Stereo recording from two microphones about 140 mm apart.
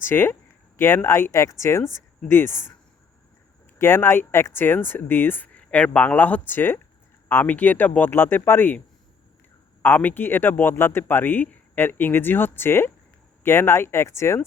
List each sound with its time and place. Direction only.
0.0 s speech: 15° left (ahead or behind)
3.8 s speech: 15° left (ahead or behind)
9.8 s speech: 15° left (ahead or behind)